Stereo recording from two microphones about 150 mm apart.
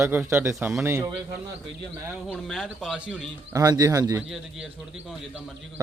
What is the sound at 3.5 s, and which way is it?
Speech, 25° right (ahead or behind).